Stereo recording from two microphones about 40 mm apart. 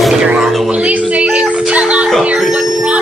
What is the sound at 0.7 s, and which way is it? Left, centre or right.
Speech, right.